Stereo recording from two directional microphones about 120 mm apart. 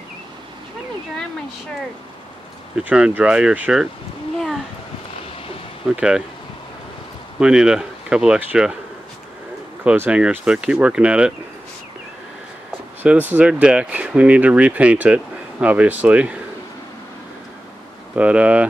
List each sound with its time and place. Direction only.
2.8 s speech: 10° right (ahead or behind)
5.9 s speech: 10° right (ahead or behind)
7.3 s speech: 5° right (ahead or behind)
9.8 s speech: 10° right (ahead or behind)
13.0 s speech: 15° right (ahead or behind)
18.1 s speech: 10° right (ahead or behind)